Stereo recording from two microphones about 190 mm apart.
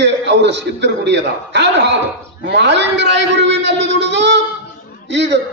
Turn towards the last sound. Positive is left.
turn(degrees=-65)  # may be behind; listen again after turning